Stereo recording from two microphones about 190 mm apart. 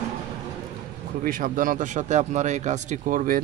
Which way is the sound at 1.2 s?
45° right (ahead or behind).